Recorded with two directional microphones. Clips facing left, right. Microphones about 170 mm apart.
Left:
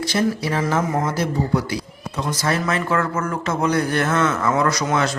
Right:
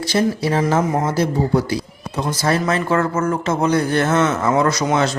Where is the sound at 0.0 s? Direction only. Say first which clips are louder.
Right 3 dB; 30° right (ahead or behind).